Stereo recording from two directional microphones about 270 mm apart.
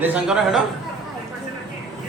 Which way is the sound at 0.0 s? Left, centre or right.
Centre.